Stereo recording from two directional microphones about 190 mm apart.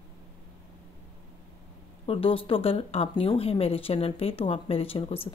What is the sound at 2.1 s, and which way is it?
Speech, 30° left (ahead or behind).